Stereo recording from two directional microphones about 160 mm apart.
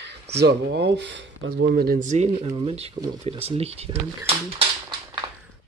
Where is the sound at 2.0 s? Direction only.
45° right (ahead or behind).